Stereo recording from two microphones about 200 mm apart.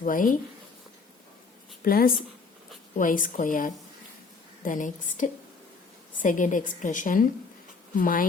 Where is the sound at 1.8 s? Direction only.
45° left (ahead or behind).